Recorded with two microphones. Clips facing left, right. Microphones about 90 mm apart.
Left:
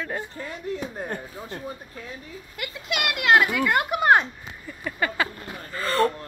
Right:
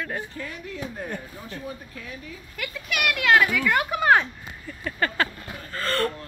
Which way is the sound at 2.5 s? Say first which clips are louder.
Left 1 dB; 20° left (ahead or behind).